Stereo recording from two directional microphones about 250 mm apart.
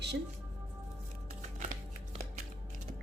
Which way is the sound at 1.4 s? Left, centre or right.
Right.